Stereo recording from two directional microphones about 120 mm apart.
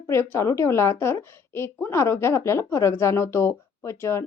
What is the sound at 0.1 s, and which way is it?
A woman's voice, 20° left (ahead or behind).